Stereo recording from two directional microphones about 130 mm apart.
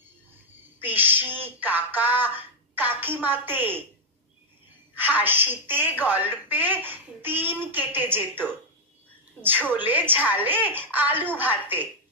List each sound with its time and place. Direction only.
0.7 s speech: 15° right (ahead or behind)
4.9 s a woman's voice: 15° right (ahead or behind)